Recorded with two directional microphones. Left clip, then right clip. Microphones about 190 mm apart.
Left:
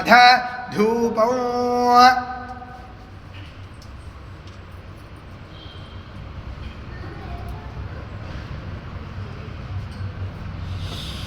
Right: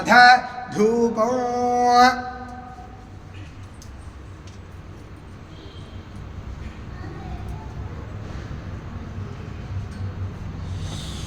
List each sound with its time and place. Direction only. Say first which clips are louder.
0.0 s mantra: even; 20° left (ahead or behind)